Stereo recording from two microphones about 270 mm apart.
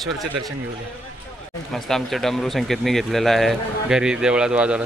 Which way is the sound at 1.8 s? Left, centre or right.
Centre.